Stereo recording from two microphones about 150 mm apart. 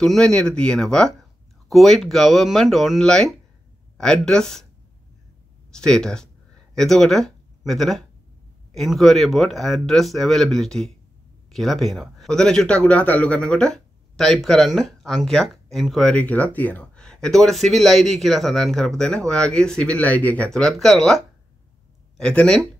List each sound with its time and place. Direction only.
0.0 s a man's voice: 5° left (ahead or behind)
5.7 s a man's voice: 5° left (ahead or behind)